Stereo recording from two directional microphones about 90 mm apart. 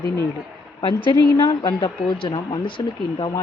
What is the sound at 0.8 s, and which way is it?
A woman's voice, 65° left (ahead or behind).